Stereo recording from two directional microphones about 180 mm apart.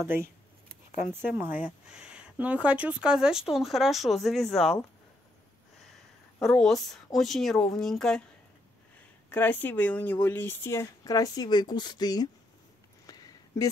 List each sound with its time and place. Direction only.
0.0 s speech: 15° right (ahead or behind); by 4.7 s centre (ahead or behind)
6.4 s speech: centre (ahead or behind)
9.3 s a woman's voice: 10° left (ahead or behind)
13.0 s a sound: 20° left (ahead or behind)